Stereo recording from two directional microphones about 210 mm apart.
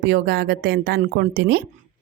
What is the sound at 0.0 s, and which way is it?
A woman's voice, 50° right (ahead or behind).